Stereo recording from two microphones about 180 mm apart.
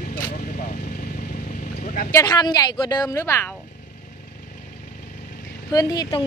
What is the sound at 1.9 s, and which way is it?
Vehicle, 50° left (ahead or behind).